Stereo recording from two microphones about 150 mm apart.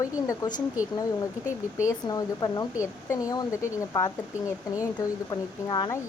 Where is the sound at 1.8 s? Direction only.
25° left (ahead or behind).